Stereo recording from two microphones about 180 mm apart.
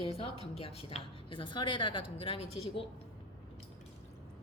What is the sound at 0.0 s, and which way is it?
A woman's voice, 30° left (ahead or behind).